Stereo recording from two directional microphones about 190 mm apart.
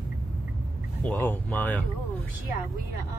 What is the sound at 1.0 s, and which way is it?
Speech, 10° left (ahead or behind).